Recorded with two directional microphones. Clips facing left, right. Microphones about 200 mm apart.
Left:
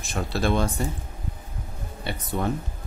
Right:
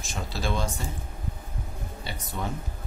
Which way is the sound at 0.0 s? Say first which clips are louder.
Left 6 dB; 60° left (ahead or behind).